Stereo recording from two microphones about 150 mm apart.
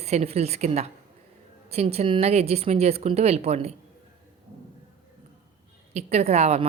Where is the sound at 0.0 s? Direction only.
45° right (ahead or behind).